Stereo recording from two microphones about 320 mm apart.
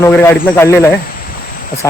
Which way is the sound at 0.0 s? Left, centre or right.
Centre.